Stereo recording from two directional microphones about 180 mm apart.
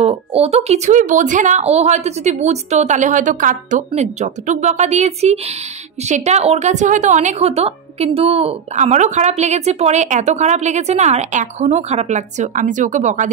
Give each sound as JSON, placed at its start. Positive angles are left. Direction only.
{"t": 0.0, "sound": "a woman's voice", "side_deg": -35}